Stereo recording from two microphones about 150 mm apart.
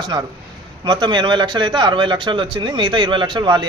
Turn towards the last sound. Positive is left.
turn(degrees=-30)  # may be behind; listen again after turning